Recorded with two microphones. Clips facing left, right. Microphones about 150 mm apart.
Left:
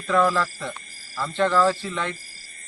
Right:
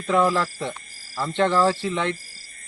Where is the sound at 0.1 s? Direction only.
20° right (ahead or behind).